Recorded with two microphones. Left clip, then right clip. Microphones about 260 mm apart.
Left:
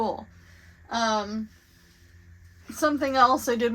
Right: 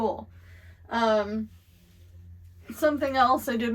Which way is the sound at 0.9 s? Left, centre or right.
Centre.